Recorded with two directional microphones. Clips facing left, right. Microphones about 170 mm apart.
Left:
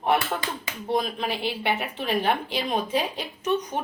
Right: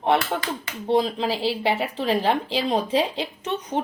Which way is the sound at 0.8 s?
30° right (ahead or behind).